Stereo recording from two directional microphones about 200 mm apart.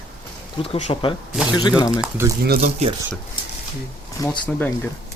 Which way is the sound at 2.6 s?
30° right (ahead or behind).